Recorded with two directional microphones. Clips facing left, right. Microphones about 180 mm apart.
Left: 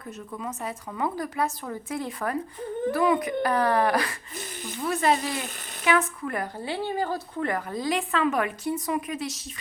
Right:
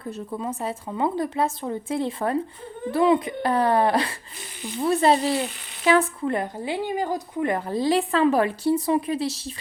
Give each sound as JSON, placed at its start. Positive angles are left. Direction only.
{"t": 0.0, "sound": "a woman's voice", "side_deg": -30}